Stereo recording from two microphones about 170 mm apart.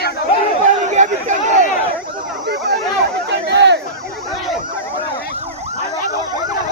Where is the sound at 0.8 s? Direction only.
45° right (ahead or behind).